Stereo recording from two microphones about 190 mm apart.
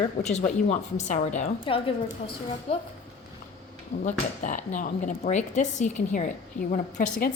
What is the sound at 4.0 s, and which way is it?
Speech, 40° left (ahead or behind).